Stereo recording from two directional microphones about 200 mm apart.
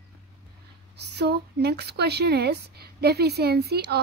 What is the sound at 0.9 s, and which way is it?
Speech, 55° right (ahead or behind).